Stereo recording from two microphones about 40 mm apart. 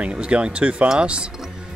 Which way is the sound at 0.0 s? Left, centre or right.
Right.